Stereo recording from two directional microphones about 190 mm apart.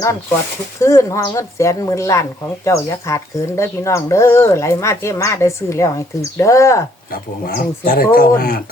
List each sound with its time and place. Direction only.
0.8 s speech: 15° left (ahead or behind)
7.1 s speech: 50° left (ahead or behind)